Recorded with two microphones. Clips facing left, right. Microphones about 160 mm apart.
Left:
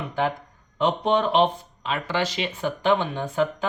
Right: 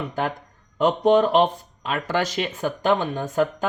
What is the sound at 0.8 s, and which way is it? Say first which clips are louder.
Speech: right 4 dB; 45° right (ahead or behind).